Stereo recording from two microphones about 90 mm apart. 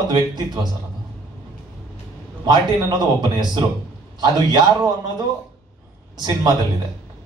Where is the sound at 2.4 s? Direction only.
50° right (ahead or behind).